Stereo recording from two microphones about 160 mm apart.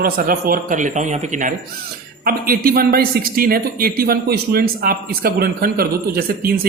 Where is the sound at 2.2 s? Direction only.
65° right (ahead or behind).